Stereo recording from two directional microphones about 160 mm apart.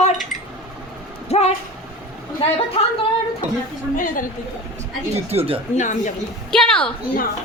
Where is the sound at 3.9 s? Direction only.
55° left (ahead or behind).